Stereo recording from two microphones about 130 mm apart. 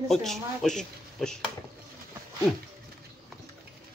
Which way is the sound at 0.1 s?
Centre (ahead or behind).